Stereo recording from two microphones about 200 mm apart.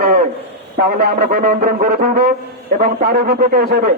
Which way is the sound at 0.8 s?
50° right (ahead or behind).